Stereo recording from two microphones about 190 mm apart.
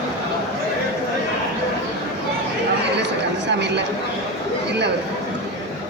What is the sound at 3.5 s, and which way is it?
Speech, 65° right (ahead or behind).